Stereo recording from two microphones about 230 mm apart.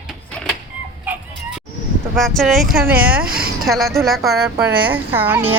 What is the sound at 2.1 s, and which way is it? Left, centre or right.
Speech, centre.